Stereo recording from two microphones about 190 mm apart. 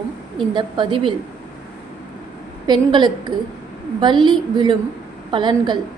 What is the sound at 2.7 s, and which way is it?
A woman's voice, 20° right (ahead or behind).